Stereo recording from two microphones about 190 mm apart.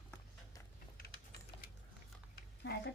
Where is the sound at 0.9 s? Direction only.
55° left (ahead or behind).